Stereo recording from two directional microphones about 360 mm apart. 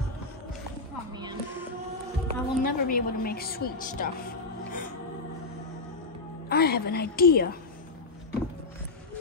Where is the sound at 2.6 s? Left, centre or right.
Left.